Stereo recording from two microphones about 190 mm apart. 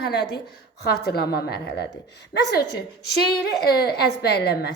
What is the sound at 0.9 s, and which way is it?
A woman's voice, 55° left (ahead or behind).